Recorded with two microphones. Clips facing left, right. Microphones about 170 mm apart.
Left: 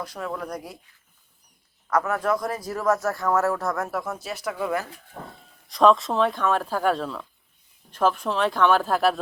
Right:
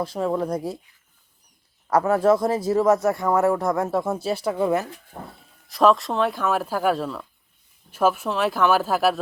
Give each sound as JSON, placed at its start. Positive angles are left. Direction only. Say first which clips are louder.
{"t": 0.0, "sound": "a man's voice", "louder": "right 8 dB", "side_deg": -30}
{"t": 1.9, "sound": "a man's voice", "louder": "right 6 dB", "side_deg": -30}
{"t": 5.6, "sound": "speech", "louder": "even", "side_deg": 0}